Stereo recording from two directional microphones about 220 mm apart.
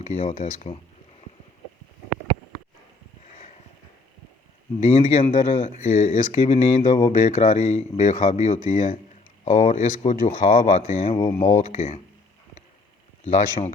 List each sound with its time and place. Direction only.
0.0 s speech: 30° left (ahead or behind)
4.9 s speech: 30° left (ahead or behind)
13.2 s speech: 30° left (ahead or behind)